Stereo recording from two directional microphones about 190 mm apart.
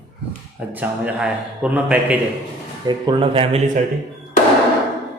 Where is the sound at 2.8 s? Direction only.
25° right (ahead or behind).